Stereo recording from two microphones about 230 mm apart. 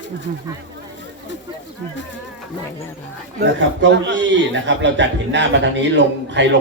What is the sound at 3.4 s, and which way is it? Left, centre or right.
Speech, right.